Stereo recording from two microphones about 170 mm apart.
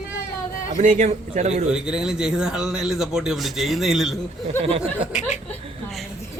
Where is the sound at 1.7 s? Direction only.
5° right (ahead or behind).